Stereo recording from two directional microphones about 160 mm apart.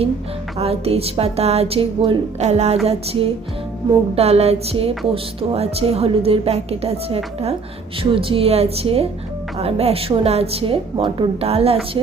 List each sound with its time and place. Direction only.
0.6 s speech: 40° right (ahead or behind)